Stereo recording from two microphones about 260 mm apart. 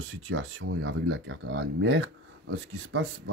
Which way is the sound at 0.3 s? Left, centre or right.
Right.